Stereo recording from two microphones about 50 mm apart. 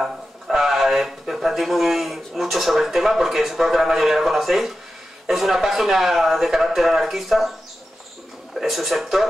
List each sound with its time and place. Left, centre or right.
0.0 s a sound: centre
2.4 s a man's voice: centre
8.5 s a man's voice: centre